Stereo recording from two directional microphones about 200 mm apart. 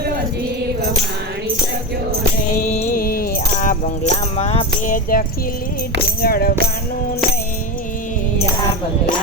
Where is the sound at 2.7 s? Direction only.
40° left (ahead or behind).